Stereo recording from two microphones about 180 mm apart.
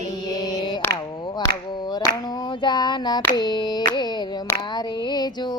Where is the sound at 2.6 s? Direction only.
25° left (ahead or behind).